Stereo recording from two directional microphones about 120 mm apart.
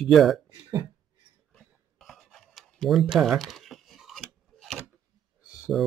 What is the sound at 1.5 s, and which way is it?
Writing, centre (ahead or behind).